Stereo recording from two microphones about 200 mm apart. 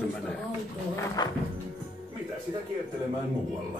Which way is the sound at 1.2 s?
20° left (ahead or behind).